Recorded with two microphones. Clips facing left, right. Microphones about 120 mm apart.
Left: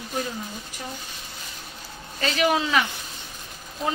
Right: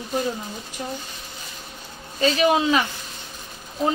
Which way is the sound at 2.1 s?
25° right (ahead or behind).